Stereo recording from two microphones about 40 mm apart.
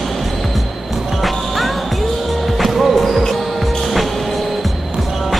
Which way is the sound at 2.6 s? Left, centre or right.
Centre.